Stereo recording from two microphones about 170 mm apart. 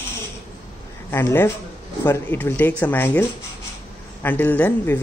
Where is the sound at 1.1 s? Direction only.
15° left (ahead or behind).